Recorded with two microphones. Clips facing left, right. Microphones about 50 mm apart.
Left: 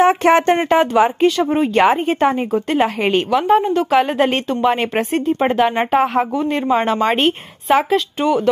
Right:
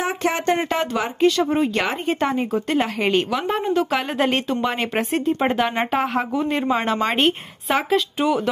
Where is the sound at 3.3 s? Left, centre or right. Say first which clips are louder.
Left 8 dB; centre.